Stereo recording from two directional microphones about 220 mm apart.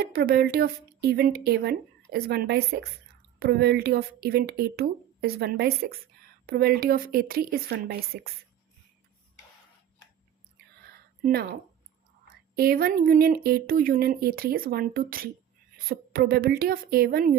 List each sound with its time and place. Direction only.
0.0 s speech: 45° right (ahead or behind)
11.2 s speech: 45° right (ahead or behind)